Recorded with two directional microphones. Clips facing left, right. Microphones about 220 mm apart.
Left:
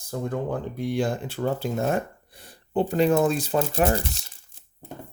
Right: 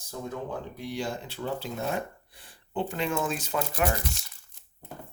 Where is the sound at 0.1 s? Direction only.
60° left (ahead or behind); by 4.3 s 30° left (ahead or behind).